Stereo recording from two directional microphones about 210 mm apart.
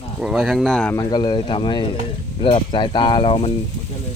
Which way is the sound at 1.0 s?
20° left (ahead or behind).